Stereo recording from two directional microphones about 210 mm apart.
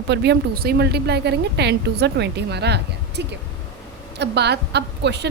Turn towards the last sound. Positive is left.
turn(degrees=-55)  # may be behind; listen again after turning